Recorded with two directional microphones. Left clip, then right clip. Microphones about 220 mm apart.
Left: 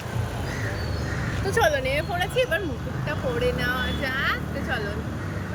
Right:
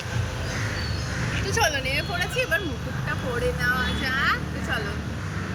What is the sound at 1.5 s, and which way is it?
Speech, 15° left (ahead or behind).